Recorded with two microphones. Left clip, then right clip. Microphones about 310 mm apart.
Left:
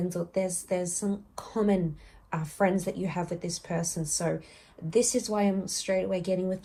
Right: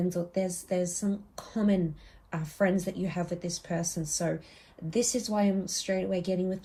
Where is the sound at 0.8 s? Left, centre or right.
Centre.